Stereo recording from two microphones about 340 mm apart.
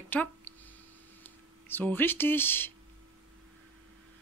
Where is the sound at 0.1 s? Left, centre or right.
Centre.